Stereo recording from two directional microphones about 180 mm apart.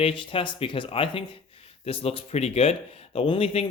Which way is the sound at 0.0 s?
30° left (ahead or behind).